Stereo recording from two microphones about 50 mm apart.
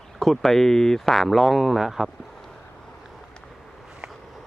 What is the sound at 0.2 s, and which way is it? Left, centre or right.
Speech, centre.